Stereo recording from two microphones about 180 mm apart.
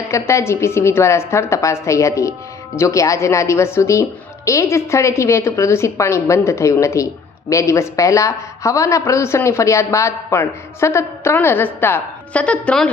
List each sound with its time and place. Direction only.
0.1 s a woman's voice: 15° left (ahead or behind)